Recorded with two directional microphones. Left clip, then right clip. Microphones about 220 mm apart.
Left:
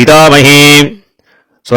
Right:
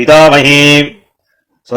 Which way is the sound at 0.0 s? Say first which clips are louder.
Left 1 dB; 50° left (ahead or behind).